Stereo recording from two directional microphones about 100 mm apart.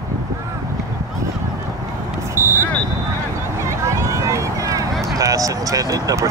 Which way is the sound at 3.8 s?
30° right (ahead or behind).